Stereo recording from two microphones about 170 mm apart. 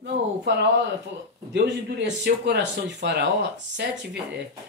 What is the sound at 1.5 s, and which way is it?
Speech, 90° right.